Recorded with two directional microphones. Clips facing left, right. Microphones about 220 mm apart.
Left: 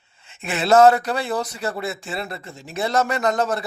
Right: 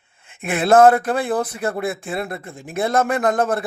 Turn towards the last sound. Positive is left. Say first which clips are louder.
# right 3 dB
turn(degrees=-55)  # may be behind; listen again after turning